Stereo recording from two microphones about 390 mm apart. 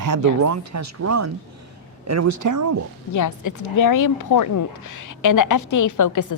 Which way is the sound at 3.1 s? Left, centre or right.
Left.